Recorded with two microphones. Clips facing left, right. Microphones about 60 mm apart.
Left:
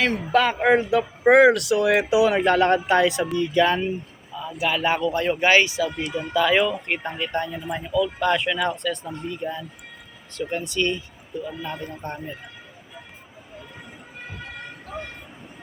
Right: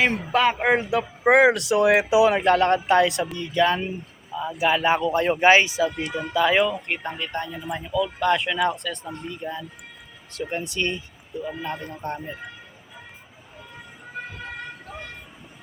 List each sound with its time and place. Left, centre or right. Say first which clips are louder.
0.0 s speech: even; centre
1.5 s speech: right 1 dB; right
2.3 s speech: even; centre
4.4 s speech: right 3 dB; right
4.8 s speech: right 1 dB; centre
6.8 s speech: left 2 dB; centre
7.9 s speech: even; centre
10.5 s speech: left 3 dB; centre
11.6 s speech: right 1 dB; centre